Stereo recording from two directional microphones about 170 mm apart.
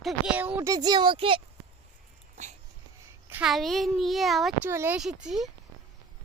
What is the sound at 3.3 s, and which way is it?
Speech, 5° right (ahead or behind).